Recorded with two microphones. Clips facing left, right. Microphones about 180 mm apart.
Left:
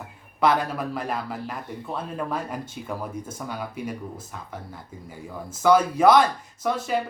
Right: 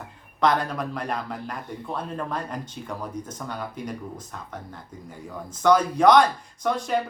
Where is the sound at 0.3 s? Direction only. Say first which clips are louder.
Left 1 dB; 5° left (ahead or behind).